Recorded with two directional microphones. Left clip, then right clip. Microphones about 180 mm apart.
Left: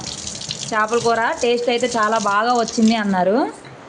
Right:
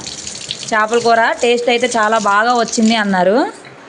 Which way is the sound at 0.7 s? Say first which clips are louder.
Right 5 dB; 10° right (ahead or behind).